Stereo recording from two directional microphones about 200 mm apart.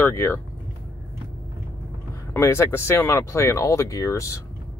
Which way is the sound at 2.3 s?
15° left (ahead or behind).